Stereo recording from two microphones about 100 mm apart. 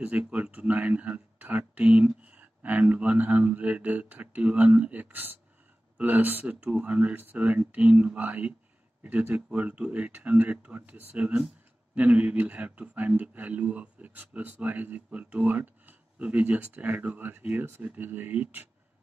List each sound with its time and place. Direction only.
0.3 s speech: 10° right (ahead or behind)